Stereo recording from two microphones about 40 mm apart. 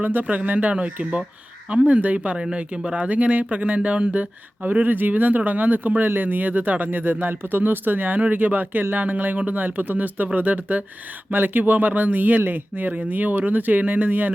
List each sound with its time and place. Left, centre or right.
0.0 s speech: right
2.1 s speech: right
3.1 s speech: right